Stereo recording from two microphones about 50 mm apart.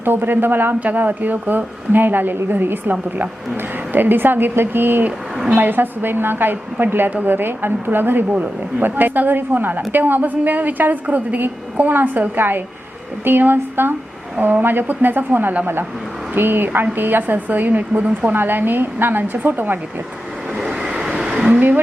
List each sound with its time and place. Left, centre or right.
0.0 s a woman's voice: right
3.9 s a woman's voice: right
11.4 s a woman's voice: right
18.3 s a woman's voice: right
20.6 s vehicle: centre